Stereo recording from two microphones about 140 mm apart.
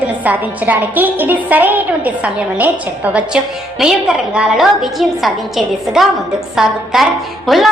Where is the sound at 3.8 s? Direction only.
5° right (ahead or behind).